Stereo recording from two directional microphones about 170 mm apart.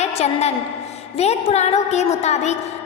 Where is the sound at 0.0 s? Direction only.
40° left (ahead or behind).